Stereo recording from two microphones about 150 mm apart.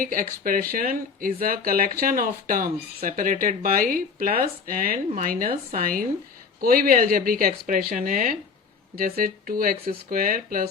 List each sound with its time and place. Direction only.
0.0 s speech: 65° right (ahead or behind)